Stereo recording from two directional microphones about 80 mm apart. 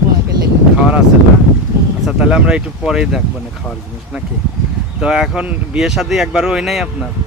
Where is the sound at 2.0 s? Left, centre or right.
Centre.